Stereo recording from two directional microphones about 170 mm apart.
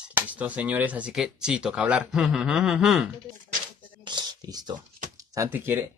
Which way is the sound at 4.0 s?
25° right (ahead or behind).